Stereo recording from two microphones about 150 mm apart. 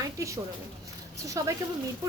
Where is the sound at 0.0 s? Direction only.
20° right (ahead or behind).